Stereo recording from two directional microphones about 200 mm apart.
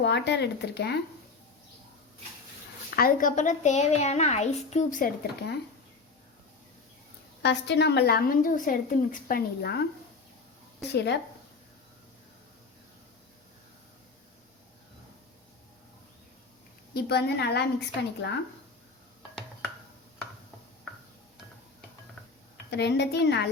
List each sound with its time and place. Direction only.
0.0 s speech: 60° left (ahead or behind)
2.9 s a woman's voice: 45° left (ahead or behind)
7.4 s a woman's voice: 60° left (ahead or behind)
10.9 s speech: 60° left (ahead or behind)
16.9 s a woman's voice: 55° left (ahead or behind)
22.7 s speech: 60° left (ahead or behind)